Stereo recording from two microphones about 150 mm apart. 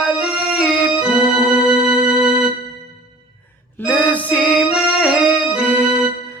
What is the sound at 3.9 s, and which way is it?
Music, 10° left (ahead or behind).